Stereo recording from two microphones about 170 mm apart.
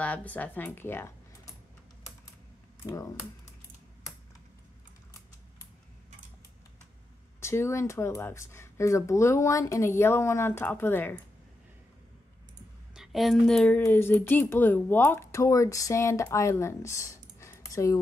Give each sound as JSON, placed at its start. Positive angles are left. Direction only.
{"t": 0.0, "sound": "a woman's voice", "side_deg": 10}
{"t": 2.8, "sound": "speech", "side_deg": 15}
{"t": 7.3, "sound": "a woman's voice", "side_deg": 15}
{"t": 12.9, "sound": "a woman's voice", "side_deg": 0}